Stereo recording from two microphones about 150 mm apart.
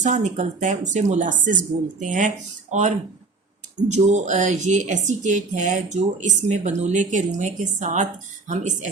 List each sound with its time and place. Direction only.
0.0 s speech: 55° right (ahead or behind)
3.8 s speech: 50° right (ahead or behind)